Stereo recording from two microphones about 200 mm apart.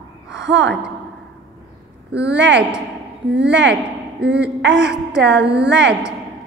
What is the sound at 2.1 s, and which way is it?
Speech, 60° right (ahead or behind).